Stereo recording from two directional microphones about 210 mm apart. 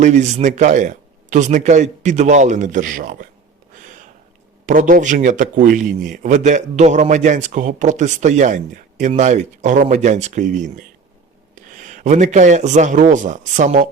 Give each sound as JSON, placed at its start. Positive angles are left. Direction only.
{"t": 0.0, "sound": "speech", "side_deg": -35}
{"t": 4.6, "sound": "speech", "side_deg": -40}
{"t": 11.8, "sound": "speech", "side_deg": -35}